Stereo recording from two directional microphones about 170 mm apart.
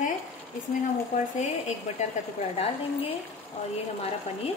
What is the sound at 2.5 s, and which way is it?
Speech, 35° left (ahead or behind).